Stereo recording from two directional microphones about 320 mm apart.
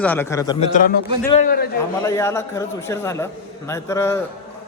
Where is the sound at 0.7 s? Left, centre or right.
Left.